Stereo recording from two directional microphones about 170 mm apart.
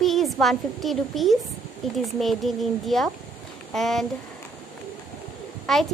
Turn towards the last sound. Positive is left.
turn(degrees=0)  # may be behind; listen again after turning